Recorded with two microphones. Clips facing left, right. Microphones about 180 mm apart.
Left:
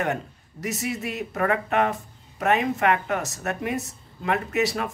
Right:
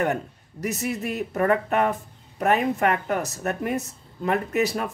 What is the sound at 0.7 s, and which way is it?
Speech, 35° right (ahead or behind).